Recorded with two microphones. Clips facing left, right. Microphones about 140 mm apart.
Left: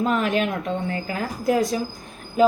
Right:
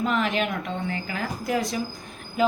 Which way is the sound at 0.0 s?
45° left (ahead or behind).